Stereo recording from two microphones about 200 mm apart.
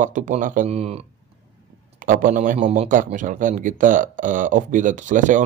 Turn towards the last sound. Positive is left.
turn(degrees=-40)  # may be behind; listen again after turning